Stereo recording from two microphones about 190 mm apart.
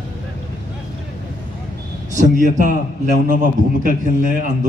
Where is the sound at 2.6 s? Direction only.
45° right (ahead or behind).